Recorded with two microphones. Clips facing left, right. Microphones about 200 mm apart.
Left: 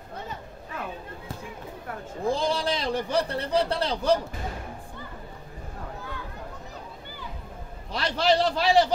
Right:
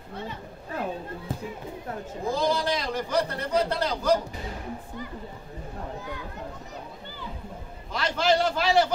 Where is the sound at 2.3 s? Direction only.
30° left (ahead or behind).